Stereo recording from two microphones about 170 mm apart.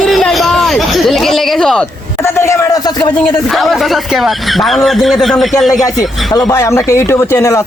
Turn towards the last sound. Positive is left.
turn(degrees=20)  # may be behind; listen again after turning